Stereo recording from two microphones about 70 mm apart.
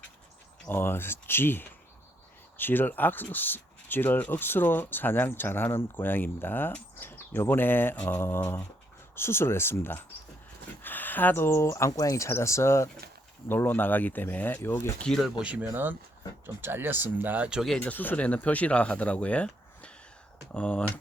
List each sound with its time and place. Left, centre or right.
0.7 s speech: left
11.9 s speech: left
13.5 s speech: left
15.6 s speech: right
17.7 s speech: left